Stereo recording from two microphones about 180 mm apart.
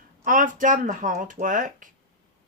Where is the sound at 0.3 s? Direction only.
50° right (ahead or behind).